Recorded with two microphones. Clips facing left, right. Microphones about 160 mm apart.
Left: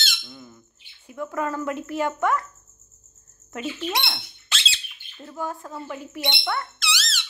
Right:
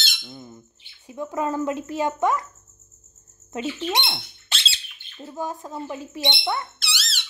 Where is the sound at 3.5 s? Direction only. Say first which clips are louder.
Right 2 dB; 25° right (ahead or behind).